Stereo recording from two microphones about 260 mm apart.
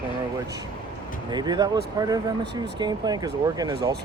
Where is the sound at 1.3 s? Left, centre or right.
Centre.